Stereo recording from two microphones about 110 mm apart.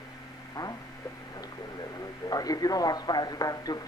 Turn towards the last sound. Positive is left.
turn(degrees=35)  # may be behind; listen again after turning